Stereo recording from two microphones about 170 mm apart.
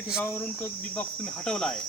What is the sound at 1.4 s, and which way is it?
Speech, 5° left (ahead or behind).